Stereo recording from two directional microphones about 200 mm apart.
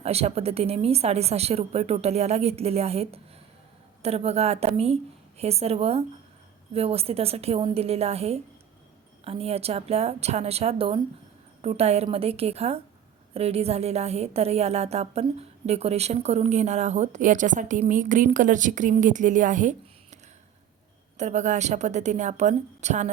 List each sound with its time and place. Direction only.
0.0 s a woman's voice: 30° right (ahead or behind)
21.2 s a woman's voice: 35° right (ahead or behind)